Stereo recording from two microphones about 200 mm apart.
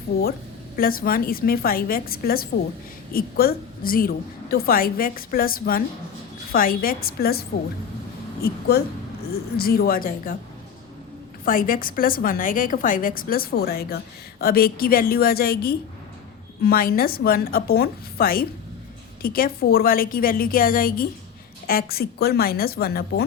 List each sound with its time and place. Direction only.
0.8 s a woman's voice: 45° left (ahead or behind)
11.4 s a woman's voice: 45° left (ahead or behind)